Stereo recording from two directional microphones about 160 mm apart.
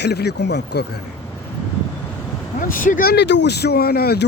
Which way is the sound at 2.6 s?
60° left (ahead or behind).